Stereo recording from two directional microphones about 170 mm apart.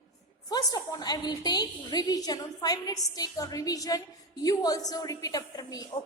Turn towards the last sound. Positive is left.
turn(degrees=20)  # may be behind; listen again after turning